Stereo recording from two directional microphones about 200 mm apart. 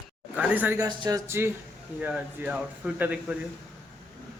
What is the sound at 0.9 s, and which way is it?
Speech, 20° right (ahead or behind).